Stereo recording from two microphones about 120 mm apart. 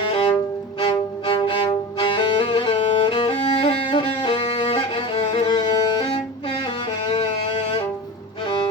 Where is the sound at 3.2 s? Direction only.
45° left (ahead or behind).